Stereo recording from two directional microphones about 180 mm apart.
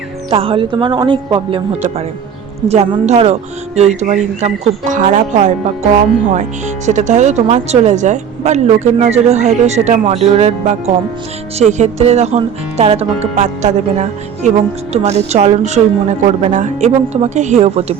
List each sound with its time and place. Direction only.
0.3 s speech: 30° right (ahead or behind)